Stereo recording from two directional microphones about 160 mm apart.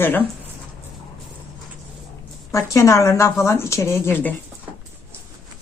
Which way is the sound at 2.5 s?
20° left (ahead or behind).